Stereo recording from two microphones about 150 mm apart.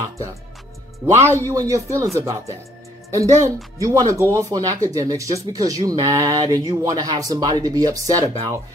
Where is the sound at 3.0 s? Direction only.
20° right (ahead or behind).